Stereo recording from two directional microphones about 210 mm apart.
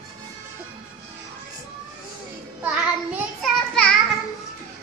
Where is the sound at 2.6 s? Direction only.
5° right (ahead or behind).